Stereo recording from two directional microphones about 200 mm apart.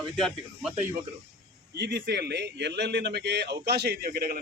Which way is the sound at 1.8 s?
55° right (ahead or behind).